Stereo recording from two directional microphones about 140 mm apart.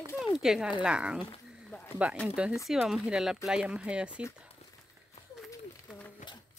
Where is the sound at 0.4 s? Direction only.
5° right (ahead or behind).